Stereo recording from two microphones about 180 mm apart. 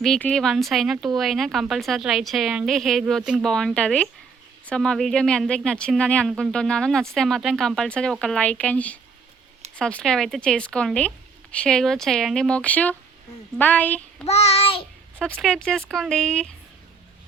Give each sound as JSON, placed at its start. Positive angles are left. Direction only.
{"t": 0.0, "sound": "a woman's voice", "side_deg": 5}
{"t": 14.3, "sound": "child singing", "side_deg": 35}
{"t": 15.2, "sound": "speech", "side_deg": 5}